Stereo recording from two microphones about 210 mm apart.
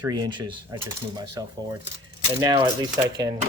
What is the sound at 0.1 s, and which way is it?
Speech, 20° right (ahead or behind).